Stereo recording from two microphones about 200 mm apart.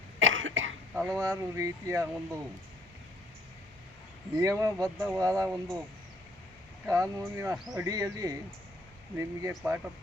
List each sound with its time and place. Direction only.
0.2 s cough: 75° right (ahead or behind)
0.9 s speech: 10° right (ahead or behind)
4.4 s speech: 15° right (ahead or behind)
4.9 s speech: centre (ahead or behind)
5.2 s speech: 15° right (ahead or behind)
6.8 s speech: 15° right (ahead or behind)
7.5 s speech: centre (ahead or behind)
7.9 s speech: 20° right (ahead or behind)